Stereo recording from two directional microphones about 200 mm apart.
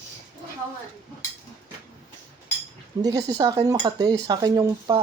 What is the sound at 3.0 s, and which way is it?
Speech, 20° right (ahead or behind).